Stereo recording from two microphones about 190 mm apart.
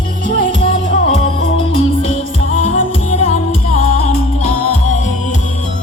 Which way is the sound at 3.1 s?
35° left (ahead or behind).